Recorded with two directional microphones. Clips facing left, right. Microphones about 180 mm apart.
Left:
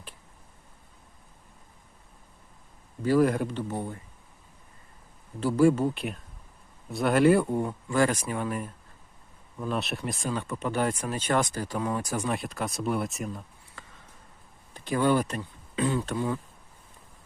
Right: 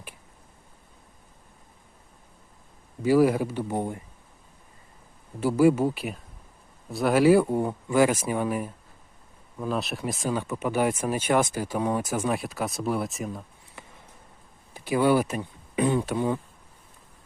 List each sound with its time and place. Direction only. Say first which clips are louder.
3.0 s speech: right 3 dB; 10° right (ahead or behind)
5.4 s speech: right 2 dB; 10° right (ahead or behind)
7.6 s speech: right 3 dB; 20° right (ahead or behind)
7.9 s speech: right 4 dB; 10° right (ahead or behind)
14.7 s speech: right 3 dB; 10° right (ahead or behind)